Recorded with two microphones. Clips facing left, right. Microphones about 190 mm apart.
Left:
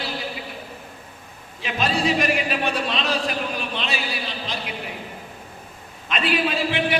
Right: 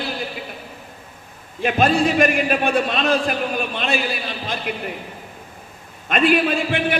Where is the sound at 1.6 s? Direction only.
50° right (ahead or behind).